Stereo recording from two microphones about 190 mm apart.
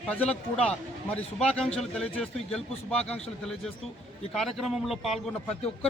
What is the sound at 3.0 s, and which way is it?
Speech, 35° left (ahead or behind).